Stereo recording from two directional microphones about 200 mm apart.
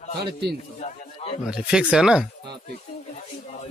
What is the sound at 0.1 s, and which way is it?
Speech, 55° right (ahead or behind).